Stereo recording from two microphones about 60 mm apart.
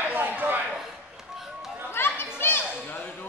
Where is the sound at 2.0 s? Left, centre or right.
Left.